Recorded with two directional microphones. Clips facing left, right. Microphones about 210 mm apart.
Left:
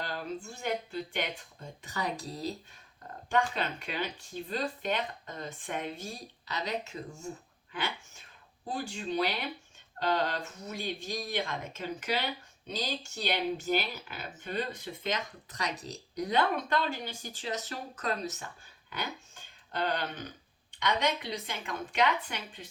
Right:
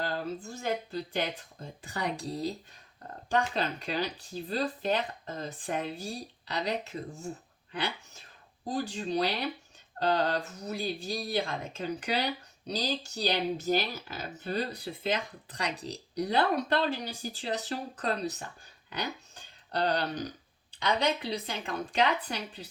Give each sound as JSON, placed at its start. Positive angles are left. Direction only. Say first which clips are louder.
{"t": 0.4, "sound": "speech", "louder": "right 1 dB", "side_deg": -35}
{"t": 19.7, "sound": "speech", "louder": "right 4 dB", "side_deg": -35}